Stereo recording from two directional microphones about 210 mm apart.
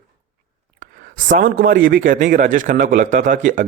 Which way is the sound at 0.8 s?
40° right (ahead or behind).